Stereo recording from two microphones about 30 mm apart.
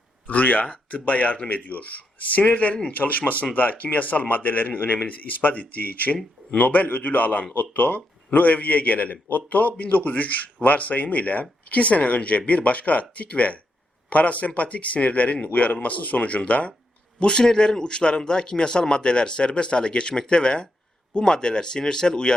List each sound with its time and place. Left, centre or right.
0.3 s speech: left
0.6 s a man's voice: left
2.9 s a man's voice: left
7.5 s a man's voice: left
17.2 s speech: left